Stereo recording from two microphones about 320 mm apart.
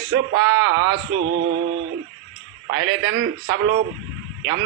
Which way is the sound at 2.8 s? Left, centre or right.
Right.